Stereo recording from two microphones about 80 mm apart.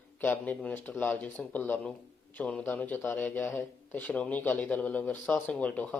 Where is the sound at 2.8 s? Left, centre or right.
Left.